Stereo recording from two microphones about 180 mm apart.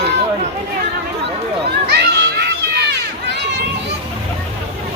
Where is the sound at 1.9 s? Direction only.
70° right (ahead or behind).